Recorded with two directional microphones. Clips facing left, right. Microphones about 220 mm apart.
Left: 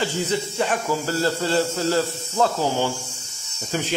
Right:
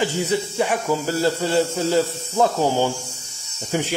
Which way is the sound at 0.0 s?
15° right (ahead or behind).